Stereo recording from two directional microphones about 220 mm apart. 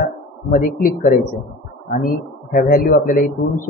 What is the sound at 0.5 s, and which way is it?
A man's voice, 40° left (ahead or behind).